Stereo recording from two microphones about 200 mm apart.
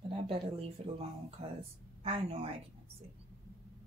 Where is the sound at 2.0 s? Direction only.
25° right (ahead or behind).